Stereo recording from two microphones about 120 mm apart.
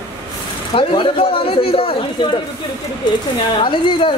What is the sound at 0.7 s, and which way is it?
Speech, 50° left (ahead or behind).